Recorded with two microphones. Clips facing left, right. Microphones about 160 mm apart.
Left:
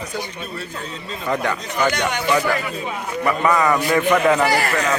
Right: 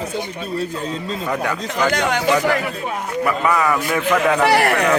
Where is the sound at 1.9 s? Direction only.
90° right.